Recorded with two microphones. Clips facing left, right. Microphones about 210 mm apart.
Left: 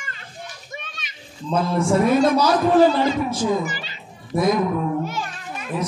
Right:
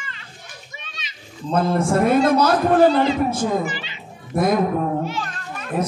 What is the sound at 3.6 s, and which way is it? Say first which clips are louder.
Children playing: right 2 dB; 40° left (ahead or behind).